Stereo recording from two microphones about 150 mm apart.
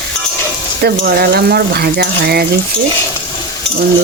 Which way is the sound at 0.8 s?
90° right.